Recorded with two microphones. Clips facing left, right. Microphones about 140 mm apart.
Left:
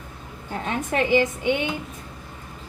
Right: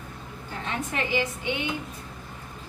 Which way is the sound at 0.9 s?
50° left (ahead or behind).